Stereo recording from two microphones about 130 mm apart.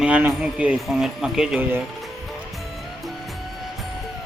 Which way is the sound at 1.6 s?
15° right (ahead or behind).